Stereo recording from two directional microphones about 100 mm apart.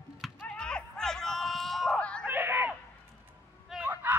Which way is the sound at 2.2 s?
20° right (ahead or behind).